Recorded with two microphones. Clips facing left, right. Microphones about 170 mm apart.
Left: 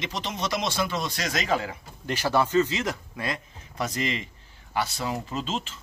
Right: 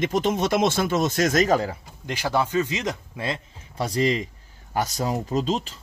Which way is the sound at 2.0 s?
15° right (ahead or behind).